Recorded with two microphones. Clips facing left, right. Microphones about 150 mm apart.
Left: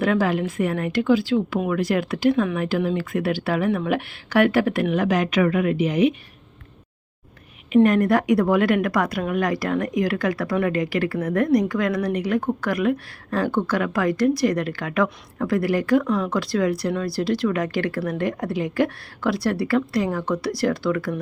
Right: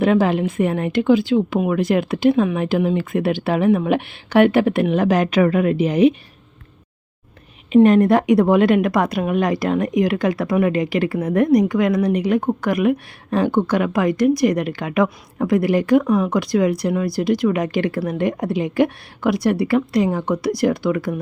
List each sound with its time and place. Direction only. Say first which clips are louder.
0.0 s a woman's voice: right 4 dB; 25° right (ahead or behind)
7.7 s a woman's voice: right 4 dB; 25° right (ahead or behind)